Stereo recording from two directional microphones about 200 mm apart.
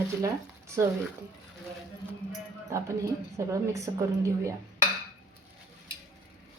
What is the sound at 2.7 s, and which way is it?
A woman's voice, 15° right (ahead or behind).